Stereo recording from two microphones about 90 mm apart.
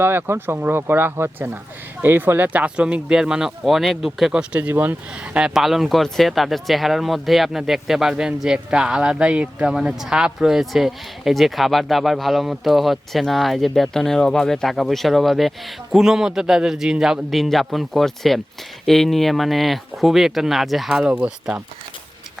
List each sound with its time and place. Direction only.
0.0 s speech: 25° right (ahead or behind)